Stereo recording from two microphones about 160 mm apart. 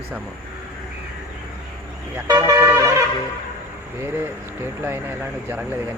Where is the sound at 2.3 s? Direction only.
20° right (ahead or behind).